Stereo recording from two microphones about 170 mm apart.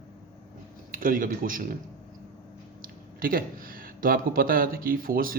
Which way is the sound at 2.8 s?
55° right (ahead or behind).